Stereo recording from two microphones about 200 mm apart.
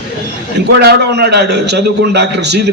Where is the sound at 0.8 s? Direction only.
55° right (ahead or behind).